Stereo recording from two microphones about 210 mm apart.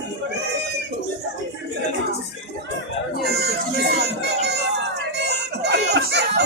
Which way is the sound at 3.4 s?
50° right (ahead or behind).